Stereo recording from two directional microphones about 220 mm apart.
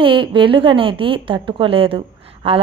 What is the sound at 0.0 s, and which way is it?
A woman's voice, 25° right (ahead or behind).